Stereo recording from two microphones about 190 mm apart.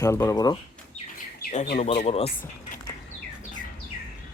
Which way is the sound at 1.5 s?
40° left (ahead or behind).